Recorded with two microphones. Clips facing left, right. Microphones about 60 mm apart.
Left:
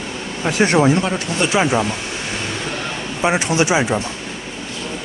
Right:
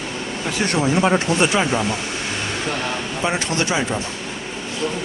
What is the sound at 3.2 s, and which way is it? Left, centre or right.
Speech, centre.